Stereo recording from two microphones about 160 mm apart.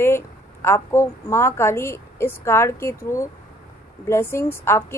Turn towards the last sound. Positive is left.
turn(degrees=15)  # may be behind; listen again after turning